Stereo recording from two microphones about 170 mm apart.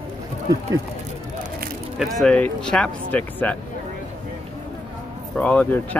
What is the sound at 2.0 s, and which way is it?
Speech, centre (ahead or behind).